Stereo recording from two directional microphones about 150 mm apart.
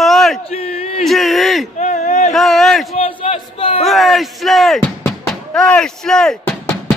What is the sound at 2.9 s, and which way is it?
Crowd, 40° left (ahead or behind).